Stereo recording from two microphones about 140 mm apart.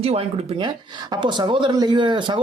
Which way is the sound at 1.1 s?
35° right (ahead or behind).